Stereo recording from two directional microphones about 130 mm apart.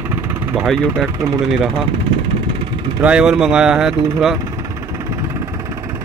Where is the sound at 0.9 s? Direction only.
20° right (ahead or behind).